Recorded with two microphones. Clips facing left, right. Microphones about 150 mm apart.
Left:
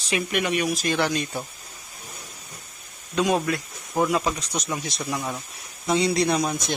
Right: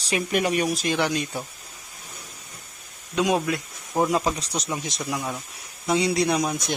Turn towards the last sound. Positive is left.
turn(degrees=-10)  # may be behind; listen again after turning